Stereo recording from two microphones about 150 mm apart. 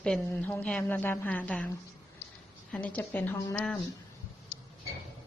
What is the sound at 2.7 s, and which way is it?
Speech, 10° left (ahead or behind).